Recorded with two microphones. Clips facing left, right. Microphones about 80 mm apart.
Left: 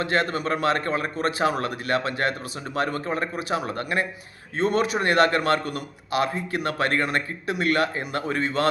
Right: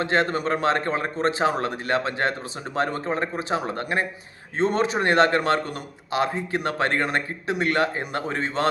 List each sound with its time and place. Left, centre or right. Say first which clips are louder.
0.0 s a man's voice: right 2 dB; right